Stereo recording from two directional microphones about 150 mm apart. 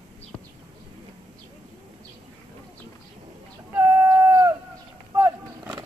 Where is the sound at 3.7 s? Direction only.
15° right (ahead or behind).